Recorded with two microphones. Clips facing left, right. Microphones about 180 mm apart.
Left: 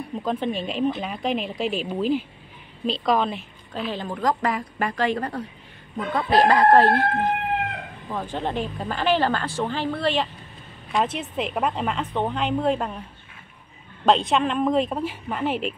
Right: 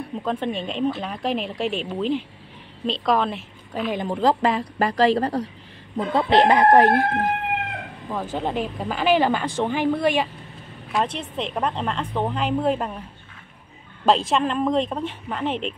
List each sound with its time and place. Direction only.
0.2 s a woman's voice: centre (ahead or behind)
3.9 s speech: 15° right (ahead or behind)
4.2 s speech: 25° right (ahead or behind)
8.1 s speech: 5° right (ahead or behind)
10.9 s a woman's voice: centre (ahead or behind)
14.0 s a woman's voice: centre (ahead or behind)